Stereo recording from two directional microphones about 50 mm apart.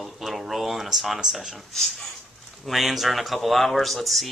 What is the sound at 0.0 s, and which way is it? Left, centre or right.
Speech, centre.